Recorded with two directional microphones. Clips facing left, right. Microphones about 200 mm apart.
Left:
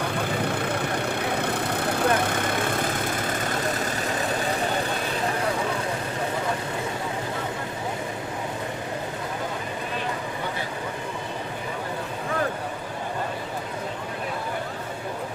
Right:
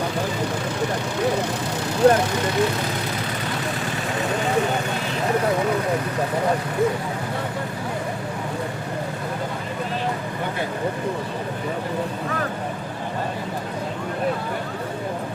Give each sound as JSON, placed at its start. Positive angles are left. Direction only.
{"t": 0.4, "sound": "vehicle", "side_deg": 60}